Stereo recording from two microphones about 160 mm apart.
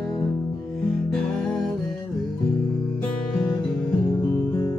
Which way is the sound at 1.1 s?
5° left (ahead or behind).